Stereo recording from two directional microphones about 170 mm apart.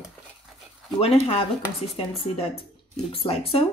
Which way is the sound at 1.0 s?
35° left (ahead or behind).